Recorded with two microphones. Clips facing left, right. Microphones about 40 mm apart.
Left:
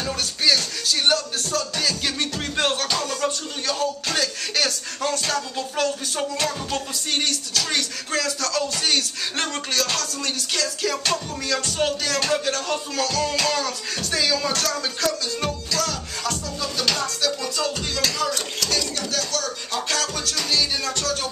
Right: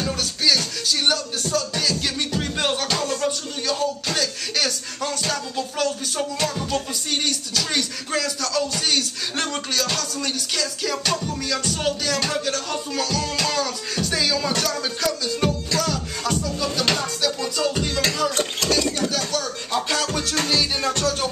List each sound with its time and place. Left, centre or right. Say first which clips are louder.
0.0 s music: even; centre
0.6 s speech: even; centre
18.3 s a sound: right 3 dB; right
18.8 s music: right 4 dB; centre
20.4 s music: left 1 dB; right